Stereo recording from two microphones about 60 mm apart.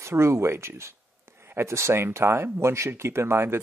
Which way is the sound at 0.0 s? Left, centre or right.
Right.